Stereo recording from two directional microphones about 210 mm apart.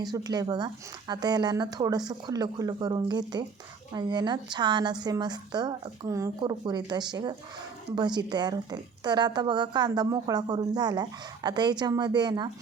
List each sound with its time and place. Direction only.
0.0 s a woman's voice: 20° right (ahead or behind)